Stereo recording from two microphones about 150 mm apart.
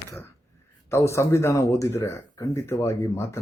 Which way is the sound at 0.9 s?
20° left (ahead or behind).